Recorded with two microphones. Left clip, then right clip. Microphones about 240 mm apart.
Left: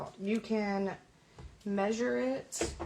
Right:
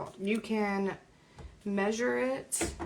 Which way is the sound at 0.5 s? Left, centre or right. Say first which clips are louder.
Right 1 dB; right.